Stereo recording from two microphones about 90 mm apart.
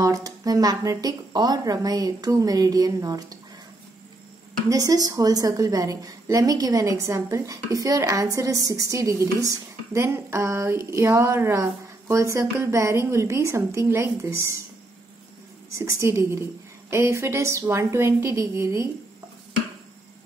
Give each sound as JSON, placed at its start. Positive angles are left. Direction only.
{"t": 0.0, "sound": "speech", "side_deg": -40}
{"t": 4.6, "sound": "a woman's voice", "side_deg": -40}
{"t": 15.8, "sound": "a woman's voice", "side_deg": -30}